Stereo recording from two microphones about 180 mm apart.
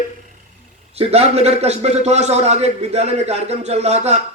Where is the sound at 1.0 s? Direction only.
35° right (ahead or behind).